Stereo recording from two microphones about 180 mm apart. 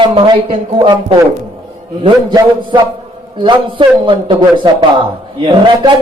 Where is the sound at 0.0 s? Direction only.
30° right (ahead or behind).